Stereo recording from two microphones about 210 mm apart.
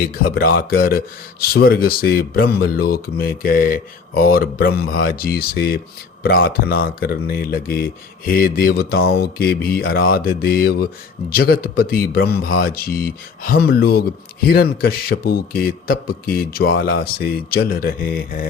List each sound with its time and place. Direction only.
0.0 s speech: 45° left (ahead or behind)